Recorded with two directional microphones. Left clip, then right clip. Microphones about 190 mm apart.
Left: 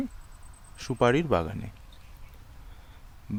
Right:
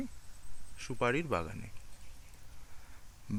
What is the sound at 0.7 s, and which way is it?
Speech, 25° left (ahead or behind).